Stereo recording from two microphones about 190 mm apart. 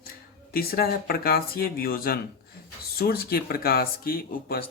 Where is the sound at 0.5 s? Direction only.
50° left (ahead or behind).